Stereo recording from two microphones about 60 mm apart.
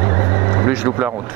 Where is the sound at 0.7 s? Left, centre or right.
Right.